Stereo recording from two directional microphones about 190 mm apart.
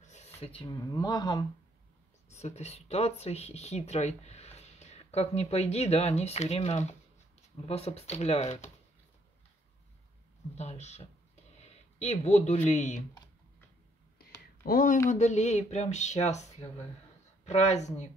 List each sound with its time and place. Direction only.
0.0 s speech: 35° left (ahead or behind); by 1.4 s 20° left (ahead or behind)
2.2 s speech: 35° left (ahead or behind)
10.5 s speech: 35° left (ahead or behind)
14.6 s speech: 45° left (ahead or behind)